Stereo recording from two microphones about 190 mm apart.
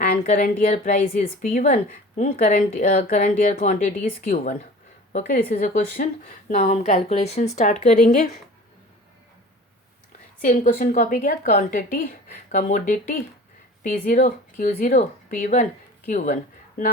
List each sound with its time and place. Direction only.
0.0 s a woman's voice: 45° left (ahead or behind)
10.4 s a woman's voice: 45° left (ahead or behind)